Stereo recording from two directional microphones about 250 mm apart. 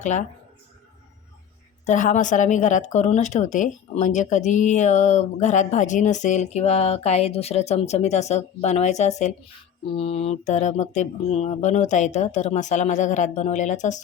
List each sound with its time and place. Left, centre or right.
0.0 s speech: left
1.9 s speech: left